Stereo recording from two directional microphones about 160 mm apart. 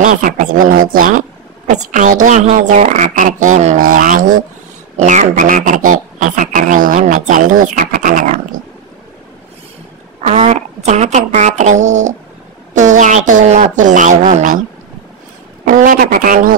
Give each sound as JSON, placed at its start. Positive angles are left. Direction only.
{"t": 0.0, "sound": "speech", "side_deg": -55}
{"t": 10.2, "sound": "speech", "side_deg": -45}
{"t": 15.7, "sound": "speech", "side_deg": -60}